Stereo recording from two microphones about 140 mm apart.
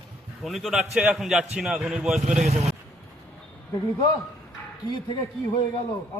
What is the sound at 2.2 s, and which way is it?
Speech, 60° right (ahead or behind).